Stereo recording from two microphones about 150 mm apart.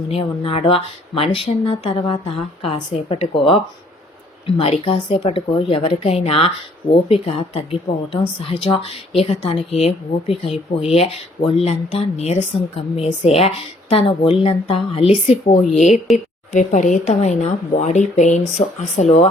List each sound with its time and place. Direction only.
0.1 s a woman's voice: 40° left (ahead or behind)
15.9 s speech: centre (ahead or behind)
16.5 s speech: 55° left (ahead or behind)